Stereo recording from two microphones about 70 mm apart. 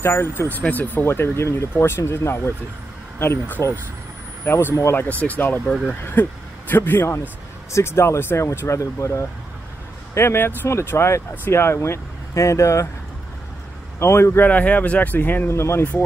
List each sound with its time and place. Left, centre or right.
0.0 s speech: left
0.4 s speech: left
1.0 s speech: left
4.7 s speech: left
5.0 s speech: left
10.1 s speech: left
13.9 s speech: left
14.4 s speech: left
15.5 s speech: left